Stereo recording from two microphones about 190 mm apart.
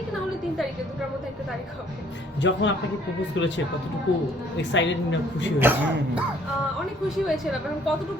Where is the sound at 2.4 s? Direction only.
75° left (ahead or behind).